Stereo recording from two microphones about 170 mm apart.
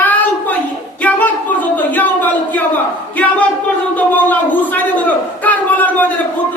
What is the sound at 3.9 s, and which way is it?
A man's voice, 10° left (ahead or behind).